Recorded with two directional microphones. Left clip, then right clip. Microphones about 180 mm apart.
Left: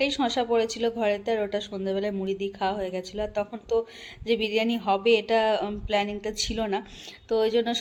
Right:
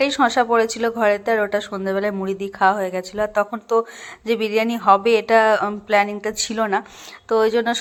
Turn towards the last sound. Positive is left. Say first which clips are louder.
# right 6 dB
turn(degrees=-5)  # may be behind; listen again after turning